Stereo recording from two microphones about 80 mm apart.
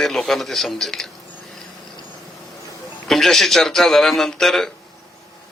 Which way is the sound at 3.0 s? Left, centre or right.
Centre.